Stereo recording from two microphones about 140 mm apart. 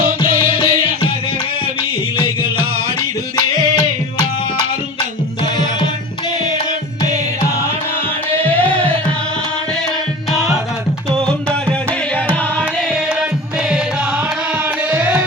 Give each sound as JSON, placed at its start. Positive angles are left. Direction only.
{"t": 0.4, "sound": "music", "side_deg": 40}
{"t": 12.1, "sound": "music", "side_deg": 10}
{"t": 12.9, "sound": "music", "side_deg": -5}
{"t": 14.8, "sound": "music", "side_deg": -15}